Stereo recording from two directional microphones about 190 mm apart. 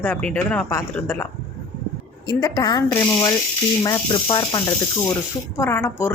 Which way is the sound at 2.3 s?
20° left (ahead or behind).